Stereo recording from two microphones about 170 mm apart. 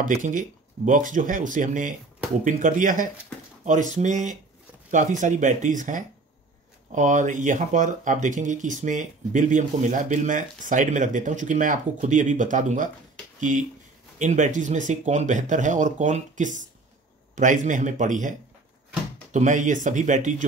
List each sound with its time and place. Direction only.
0.0 s speech: 50° right (ahead or behind)
19.3 s speech: 50° right (ahead or behind)